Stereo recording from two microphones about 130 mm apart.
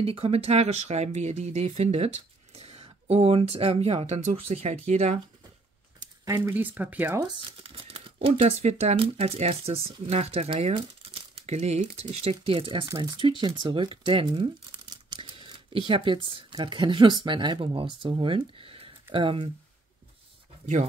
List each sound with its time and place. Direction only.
0.0 s speech: 50° right (ahead or behind)
6.2 s speech: 25° right (ahead or behind)
6.5 s speech: 15° right (ahead or behind)
7.2 s speech: 40° right (ahead or behind)